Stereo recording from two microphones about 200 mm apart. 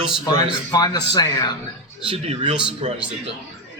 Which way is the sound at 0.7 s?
20° left (ahead or behind).